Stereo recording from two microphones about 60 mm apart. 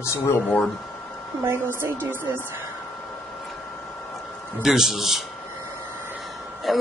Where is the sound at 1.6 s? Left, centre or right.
Right.